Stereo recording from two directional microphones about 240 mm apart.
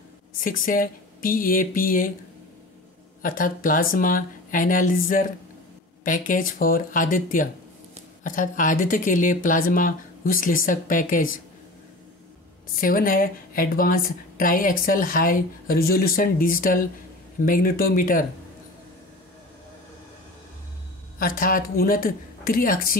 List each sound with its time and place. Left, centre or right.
0.4 s a woman's voice: left
3.2 s a woman's voice: left
12.8 s a woman's voice: left
21.2 s a woman's voice: left